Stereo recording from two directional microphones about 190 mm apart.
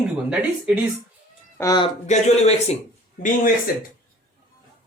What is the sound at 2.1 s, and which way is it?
Speech, 35° left (ahead or behind).